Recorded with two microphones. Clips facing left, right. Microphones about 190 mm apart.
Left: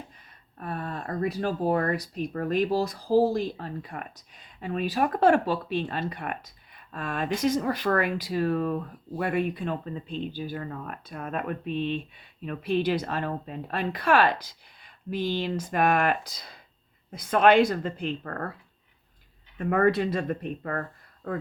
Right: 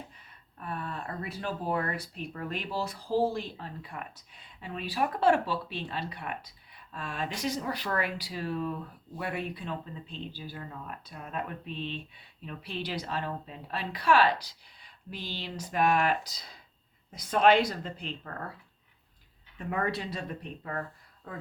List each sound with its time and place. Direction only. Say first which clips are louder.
0.6 s speech: left 4 dB; 40° left (ahead or behind)
19.5 s speech: left 9 dB; 55° left (ahead or behind)